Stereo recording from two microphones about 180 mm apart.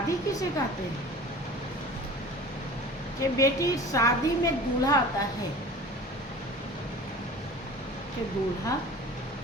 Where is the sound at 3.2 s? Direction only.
20° left (ahead or behind).